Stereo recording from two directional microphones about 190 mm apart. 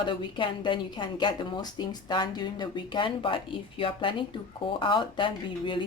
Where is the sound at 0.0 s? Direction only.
25° left (ahead or behind).